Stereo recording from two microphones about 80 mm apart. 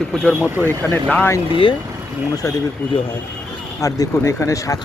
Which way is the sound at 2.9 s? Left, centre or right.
Left.